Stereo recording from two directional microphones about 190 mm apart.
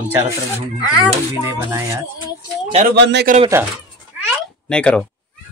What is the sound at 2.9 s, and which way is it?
Speech, 65° right (ahead or behind).